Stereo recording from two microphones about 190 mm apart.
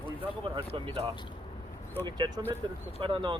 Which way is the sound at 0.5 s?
30° right (ahead or behind).